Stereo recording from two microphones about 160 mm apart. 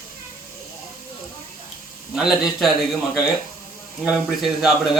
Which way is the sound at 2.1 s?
5° right (ahead or behind).